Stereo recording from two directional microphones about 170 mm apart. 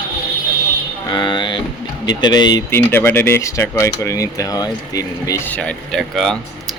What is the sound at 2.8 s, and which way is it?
Speech, 10° left (ahead or behind).